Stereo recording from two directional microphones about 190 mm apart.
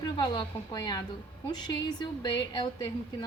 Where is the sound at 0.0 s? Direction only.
20° left (ahead or behind).